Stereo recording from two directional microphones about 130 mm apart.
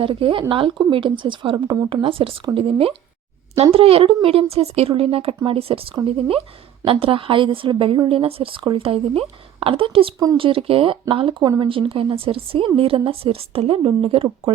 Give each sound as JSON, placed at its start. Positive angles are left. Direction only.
{"t": 0.0, "sound": "a woman's voice", "side_deg": -45}